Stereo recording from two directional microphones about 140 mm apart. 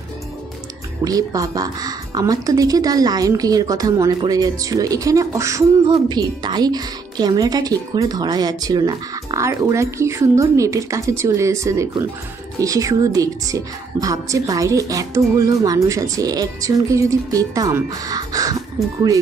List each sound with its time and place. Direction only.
1.0 s a woman's voice: 25° right (ahead or behind)